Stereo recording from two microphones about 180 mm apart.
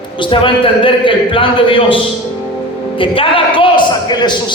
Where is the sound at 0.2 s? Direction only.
30° left (ahead or behind).